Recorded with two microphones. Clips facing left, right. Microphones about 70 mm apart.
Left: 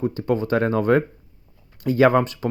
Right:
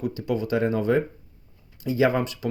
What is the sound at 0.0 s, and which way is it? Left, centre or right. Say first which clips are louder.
Speech: left 4 dB; left.